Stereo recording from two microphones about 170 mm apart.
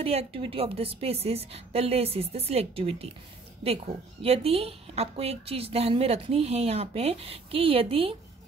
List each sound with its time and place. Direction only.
0.0 s speech: 35° right (ahead or behind)